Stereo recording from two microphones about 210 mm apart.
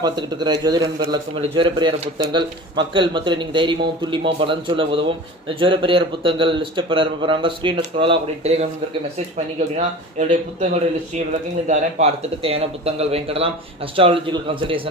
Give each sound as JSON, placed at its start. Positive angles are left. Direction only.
{"t": 0.0, "sound": "speech", "side_deg": -20}
{"t": 9.7, "sound": "speech", "side_deg": -35}
{"t": 11.7, "sound": "speech", "side_deg": -30}